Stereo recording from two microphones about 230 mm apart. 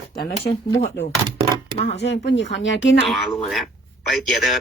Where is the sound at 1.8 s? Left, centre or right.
Left.